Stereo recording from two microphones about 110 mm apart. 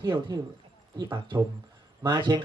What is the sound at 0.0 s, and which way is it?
Speech, 40° right (ahead or behind).